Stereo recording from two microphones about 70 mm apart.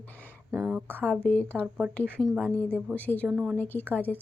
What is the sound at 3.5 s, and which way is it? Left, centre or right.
Speech, left.